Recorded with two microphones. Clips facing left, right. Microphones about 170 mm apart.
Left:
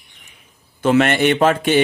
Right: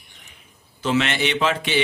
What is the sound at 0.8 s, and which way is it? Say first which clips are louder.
Speech: left 7 dB; 50° left (ahead or behind).